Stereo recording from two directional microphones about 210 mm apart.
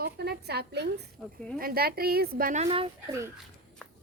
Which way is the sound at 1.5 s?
45° right (ahead or behind).